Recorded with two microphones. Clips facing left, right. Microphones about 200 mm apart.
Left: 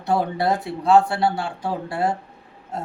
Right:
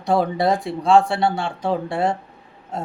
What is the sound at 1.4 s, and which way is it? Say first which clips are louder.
Speech: right 4 dB; 25° right (ahead or behind).